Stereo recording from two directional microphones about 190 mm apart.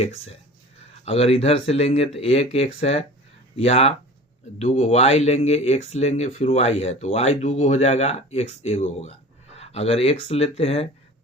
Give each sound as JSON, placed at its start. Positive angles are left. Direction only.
{"t": 0.0, "sound": "speech", "side_deg": 35}